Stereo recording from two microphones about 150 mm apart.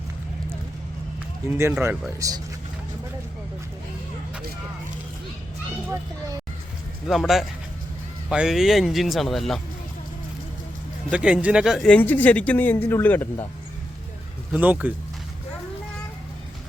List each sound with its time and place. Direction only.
1.5 s speech: 15° right (ahead or behind)
7.1 s speech: centre (ahead or behind)
11.1 s speech: 5° right (ahead or behind); by 13.2 s 15° left (ahead or behind)
14.5 s speech: 10° right (ahead or behind)